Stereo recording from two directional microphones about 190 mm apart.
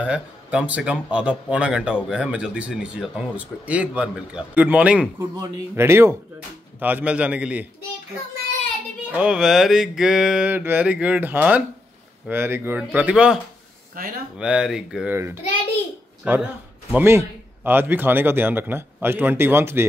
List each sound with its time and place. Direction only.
0.0 s speech: 5° right (ahead or behind)
9.1 s speech: 5° right (ahead or behind)
14.0 s speech: 50° right (ahead or behind)
14.4 s a man's voice: 5° right (ahead or behind)